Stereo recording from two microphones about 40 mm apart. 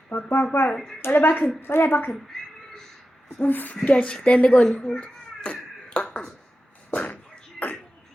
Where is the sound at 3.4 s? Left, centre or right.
Left.